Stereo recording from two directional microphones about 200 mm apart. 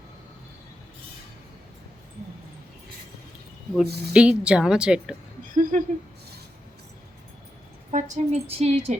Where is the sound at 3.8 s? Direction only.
55° right (ahead or behind).